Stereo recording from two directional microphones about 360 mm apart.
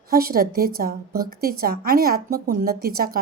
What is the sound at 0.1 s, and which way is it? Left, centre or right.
A woman's voice, right.